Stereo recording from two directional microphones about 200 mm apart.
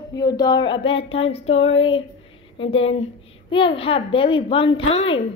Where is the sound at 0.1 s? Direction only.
20° left (ahead or behind).